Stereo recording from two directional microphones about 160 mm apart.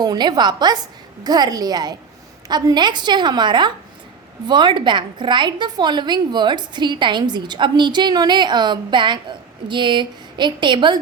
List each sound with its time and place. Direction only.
0.0 s a woman's voice: 25° right (ahead or behind)